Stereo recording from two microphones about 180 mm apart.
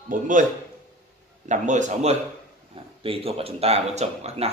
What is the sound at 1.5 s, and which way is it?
A man's voice, 40° right (ahead or behind).